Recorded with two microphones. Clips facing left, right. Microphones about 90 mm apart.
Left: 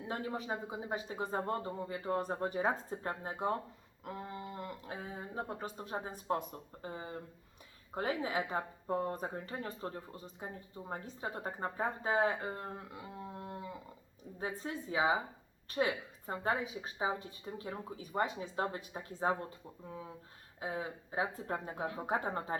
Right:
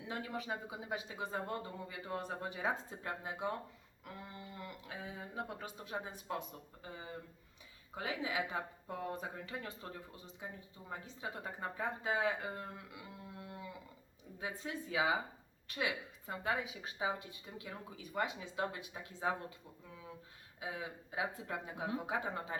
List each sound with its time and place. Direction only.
0.0 s speech: 35° left (ahead or behind)